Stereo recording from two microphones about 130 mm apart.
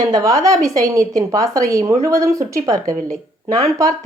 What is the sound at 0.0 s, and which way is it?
A woman's voice, 30° right (ahead or behind).